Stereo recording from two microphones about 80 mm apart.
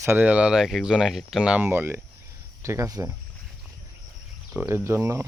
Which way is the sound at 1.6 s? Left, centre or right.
Right.